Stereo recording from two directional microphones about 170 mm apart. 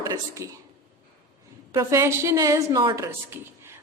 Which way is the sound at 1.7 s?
20° right (ahead or behind).